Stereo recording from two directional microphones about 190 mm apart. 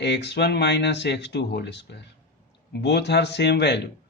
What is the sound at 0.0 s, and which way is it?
Speech, 65° left (ahead or behind).